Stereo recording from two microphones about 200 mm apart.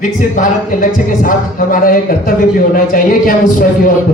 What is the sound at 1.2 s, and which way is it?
Speech, 45° left (ahead or behind).